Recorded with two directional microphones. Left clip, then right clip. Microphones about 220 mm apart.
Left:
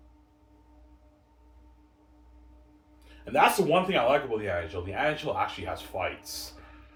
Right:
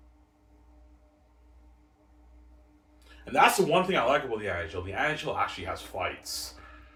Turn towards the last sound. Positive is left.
turn(degrees=15)  # may be behind; listen again after turning